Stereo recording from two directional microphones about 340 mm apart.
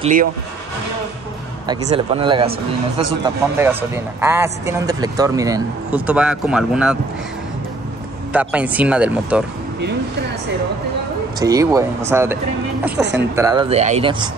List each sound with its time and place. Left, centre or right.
0.0 s speech: right
1.7 s speech: centre
3.5 s speech: centre
8.3 s speech: centre
11.3 s speech: centre
12.9 s speech: right
13.4 s speech: centre